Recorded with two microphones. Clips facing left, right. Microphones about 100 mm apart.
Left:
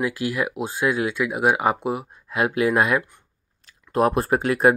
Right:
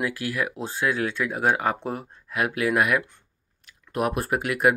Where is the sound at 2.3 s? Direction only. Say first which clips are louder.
Left 3 dB; 25° left (ahead or behind).